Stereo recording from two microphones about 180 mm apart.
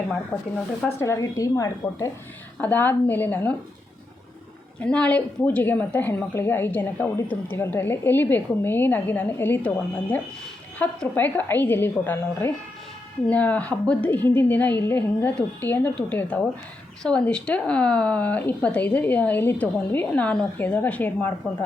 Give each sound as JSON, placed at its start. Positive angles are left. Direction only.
{"t": 0.1, "sound": "a woman's voice", "side_deg": 5}
{"t": 4.8, "sound": "a woman's voice", "side_deg": 5}